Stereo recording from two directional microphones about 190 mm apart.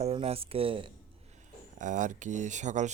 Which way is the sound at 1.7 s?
40° right (ahead or behind).